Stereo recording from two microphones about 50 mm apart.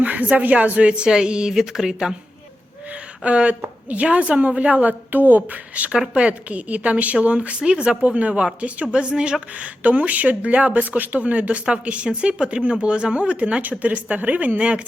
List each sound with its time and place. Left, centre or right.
0.0 s a woman's voice: right; by 2.1 s centre
2.9 s a sound: right
3.6 s a woman's voice: right